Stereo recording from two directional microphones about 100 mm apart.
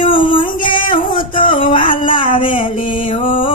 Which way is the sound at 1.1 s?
55° left (ahead or behind).